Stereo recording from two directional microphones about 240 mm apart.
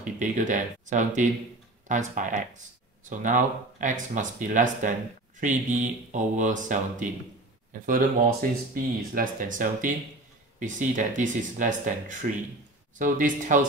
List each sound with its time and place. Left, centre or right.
0.0 s speech: right